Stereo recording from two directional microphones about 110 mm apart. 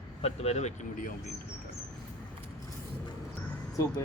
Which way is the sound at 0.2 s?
70° left (ahead or behind).